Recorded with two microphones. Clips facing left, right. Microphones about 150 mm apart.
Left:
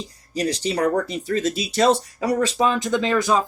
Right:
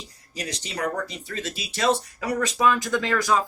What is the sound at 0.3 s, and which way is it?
Speech, 35° left (ahead or behind).